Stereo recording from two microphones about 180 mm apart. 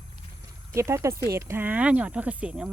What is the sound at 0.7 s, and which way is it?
Speech, 15° right (ahead or behind).